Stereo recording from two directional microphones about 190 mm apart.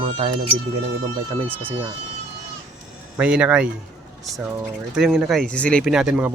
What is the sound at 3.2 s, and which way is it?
Speech, 5° right (ahead or behind).